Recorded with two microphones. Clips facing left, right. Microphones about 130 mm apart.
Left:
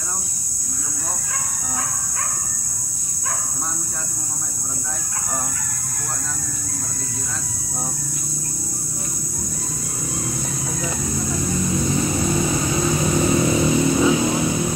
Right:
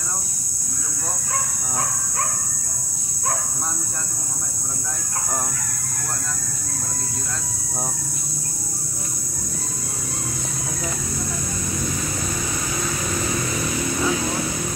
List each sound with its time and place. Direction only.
11.9 s vehicle: 25° left (ahead or behind)